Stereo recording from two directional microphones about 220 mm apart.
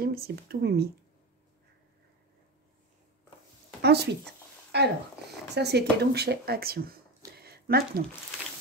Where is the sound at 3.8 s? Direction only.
45° right (ahead or behind).